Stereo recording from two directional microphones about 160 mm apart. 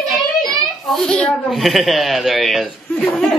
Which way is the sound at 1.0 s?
5° left (ahead or behind).